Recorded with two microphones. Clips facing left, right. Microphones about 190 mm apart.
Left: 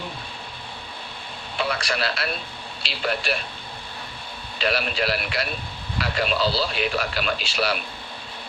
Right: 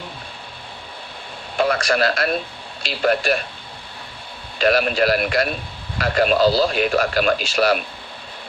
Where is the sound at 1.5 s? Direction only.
50° right (ahead or behind).